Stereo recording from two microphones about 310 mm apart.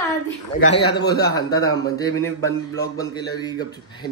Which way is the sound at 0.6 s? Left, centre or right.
Centre.